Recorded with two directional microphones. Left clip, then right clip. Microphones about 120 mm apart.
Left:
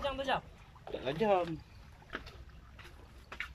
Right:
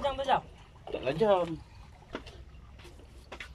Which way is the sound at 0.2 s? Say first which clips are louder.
Right 6 dB; 15° right (ahead or behind).